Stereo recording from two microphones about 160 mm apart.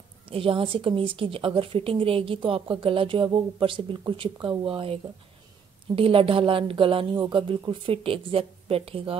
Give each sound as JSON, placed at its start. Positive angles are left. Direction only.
{"t": 0.3, "sound": "a woman's voice", "side_deg": -35}
{"t": 5.9, "sound": "a woman's voice", "side_deg": -35}